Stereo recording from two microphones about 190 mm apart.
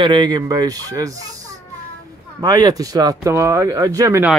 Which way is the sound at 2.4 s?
20° right (ahead or behind).